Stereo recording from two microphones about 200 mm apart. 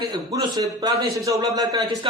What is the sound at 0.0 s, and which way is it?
A man's voice, 20° right (ahead or behind).